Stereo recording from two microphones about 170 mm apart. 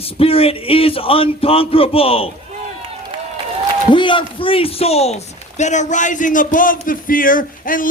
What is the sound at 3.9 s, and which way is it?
A man's voice, 30° left (ahead or behind).